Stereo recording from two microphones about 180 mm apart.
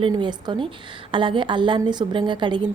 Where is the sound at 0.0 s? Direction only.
25° right (ahead or behind).